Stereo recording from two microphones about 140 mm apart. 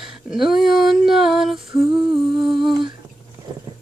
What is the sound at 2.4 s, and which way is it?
Female singing, 35° right (ahead or behind).